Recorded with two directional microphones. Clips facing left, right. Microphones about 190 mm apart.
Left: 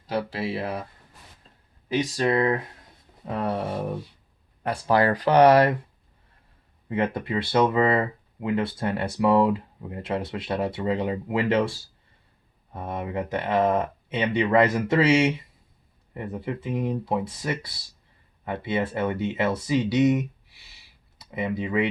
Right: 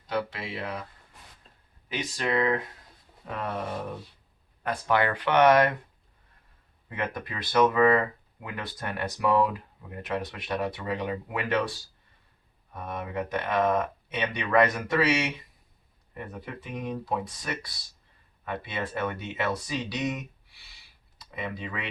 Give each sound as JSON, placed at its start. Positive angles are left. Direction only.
{"t": 0.1, "sound": "speech", "side_deg": 30}
{"t": 1.9, "sound": "speech", "side_deg": 35}
{"t": 4.6, "sound": "speech", "side_deg": 30}
{"t": 6.8, "sound": "speech", "side_deg": 25}